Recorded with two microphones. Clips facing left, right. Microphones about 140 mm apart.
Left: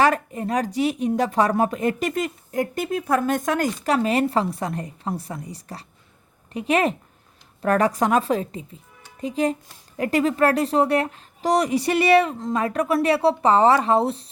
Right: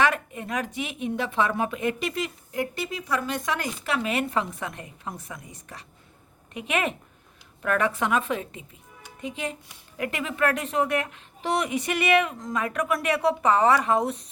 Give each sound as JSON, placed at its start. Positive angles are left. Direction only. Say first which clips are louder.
{"t": 0.0, "sound": "speech", "louder": "left 5 dB", "side_deg": 35}